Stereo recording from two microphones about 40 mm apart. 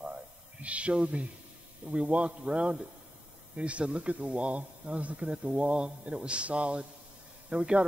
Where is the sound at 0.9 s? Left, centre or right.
Right.